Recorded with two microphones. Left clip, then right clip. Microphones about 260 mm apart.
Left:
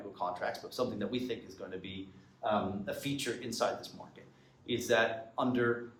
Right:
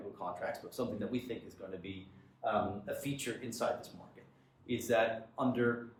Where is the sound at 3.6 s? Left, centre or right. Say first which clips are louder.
Left 2 dB; centre.